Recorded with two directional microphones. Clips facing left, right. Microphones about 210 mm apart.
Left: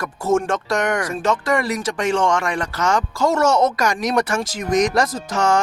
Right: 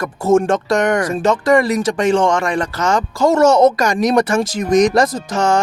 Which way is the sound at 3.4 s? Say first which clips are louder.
Right 7 dB; 10° left (ahead or behind).